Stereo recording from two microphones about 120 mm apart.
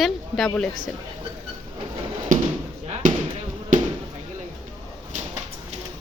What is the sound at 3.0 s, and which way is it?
Basketball bounce, 90° right.